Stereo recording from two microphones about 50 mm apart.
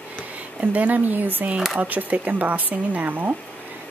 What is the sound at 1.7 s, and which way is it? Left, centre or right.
Speech, right.